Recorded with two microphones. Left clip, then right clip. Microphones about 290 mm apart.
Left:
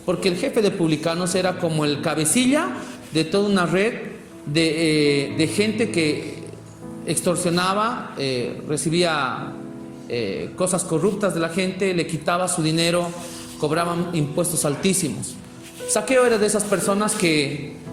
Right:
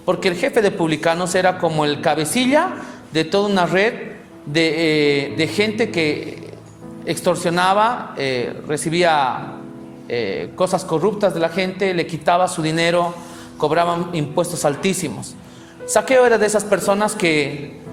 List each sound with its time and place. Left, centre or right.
0.1 s a woman's voice: right